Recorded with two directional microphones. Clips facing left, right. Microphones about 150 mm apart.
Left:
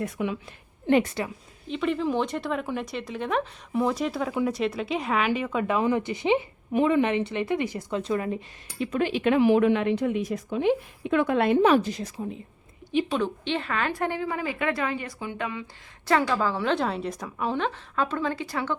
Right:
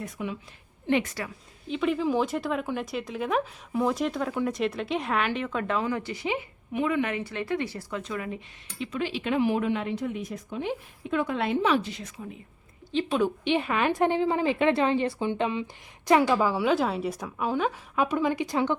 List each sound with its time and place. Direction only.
0.0 s a woman's voice: 75° left (ahead or behind)
0.9 s a woman's voice: 40° left (ahead or behind)
1.6 s speech: centre (ahead or behind); by 8.4 s 35° left (ahead or behind)
8.8 s a woman's voice: 50° left (ahead or behind); by 12.4 s 35° left (ahead or behind)
13.1 s speech: 5° right (ahead or behind)
13.4 s a woman's voice: 15° right (ahead or behind)